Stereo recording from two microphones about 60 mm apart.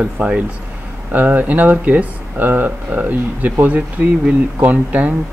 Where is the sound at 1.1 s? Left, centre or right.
Right.